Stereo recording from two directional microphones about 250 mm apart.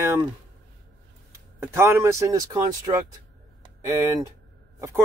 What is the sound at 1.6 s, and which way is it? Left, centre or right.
A man's voice, centre.